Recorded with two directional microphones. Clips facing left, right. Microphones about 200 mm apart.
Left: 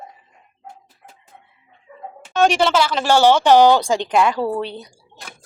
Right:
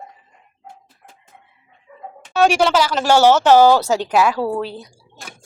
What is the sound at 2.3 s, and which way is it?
Speech, 10° right (ahead or behind).